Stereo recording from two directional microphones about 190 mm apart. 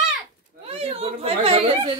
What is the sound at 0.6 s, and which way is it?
A woman's voice, 30° right (ahead or behind).